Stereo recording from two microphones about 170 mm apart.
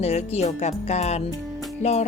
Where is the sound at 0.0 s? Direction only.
40° left (ahead or behind).